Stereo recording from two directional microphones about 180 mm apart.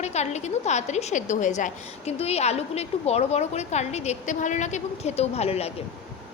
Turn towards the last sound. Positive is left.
turn(degrees=35)  # may be behind; listen again after turning